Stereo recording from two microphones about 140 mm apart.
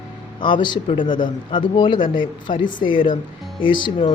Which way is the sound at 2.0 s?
75° left (ahead or behind).